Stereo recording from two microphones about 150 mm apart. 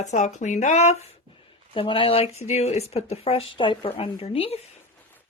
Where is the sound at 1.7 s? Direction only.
35° left (ahead or behind).